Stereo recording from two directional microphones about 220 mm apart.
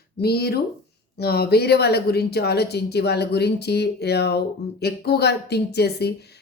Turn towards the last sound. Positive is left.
turn(degrees=45)  # may be behind; listen again after turning